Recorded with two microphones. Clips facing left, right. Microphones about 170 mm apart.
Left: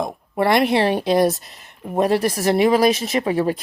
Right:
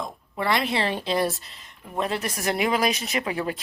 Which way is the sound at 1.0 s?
45° left (ahead or behind).